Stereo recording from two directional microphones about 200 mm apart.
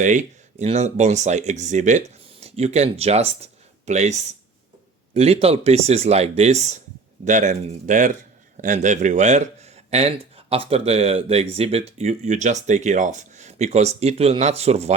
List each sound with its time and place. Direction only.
0.0 s a man's voice: 40° right (ahead or behind)